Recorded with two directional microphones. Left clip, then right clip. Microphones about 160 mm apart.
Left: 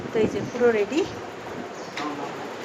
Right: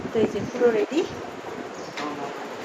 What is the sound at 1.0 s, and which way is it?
Speech, centre (ahead or behind).